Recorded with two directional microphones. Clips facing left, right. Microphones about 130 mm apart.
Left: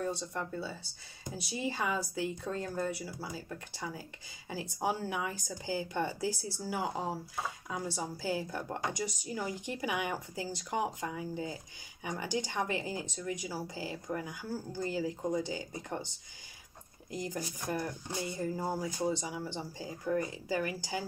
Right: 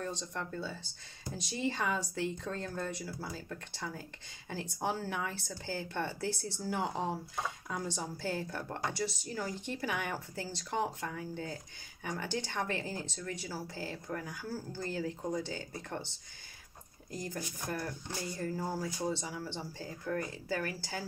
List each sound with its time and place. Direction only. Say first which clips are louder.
0.0 s speech: left 3 dB; 10° left (ahead or behind)
17.1 s speech: left 2 dB; 15° left (ahead or behind)